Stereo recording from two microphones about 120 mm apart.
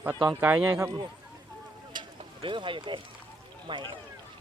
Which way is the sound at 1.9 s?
40° right (ahead or behind).